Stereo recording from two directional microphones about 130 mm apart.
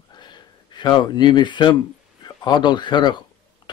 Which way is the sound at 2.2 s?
35° left (ahead or behind).